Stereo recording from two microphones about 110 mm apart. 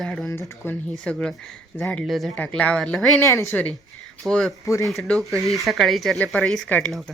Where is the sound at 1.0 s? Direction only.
5° left (ahead or behind).